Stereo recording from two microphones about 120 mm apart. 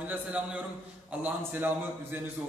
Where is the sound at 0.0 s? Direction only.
10° right (ahead or behind).